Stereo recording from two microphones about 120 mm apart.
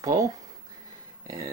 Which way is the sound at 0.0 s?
30° right (ahead or behind).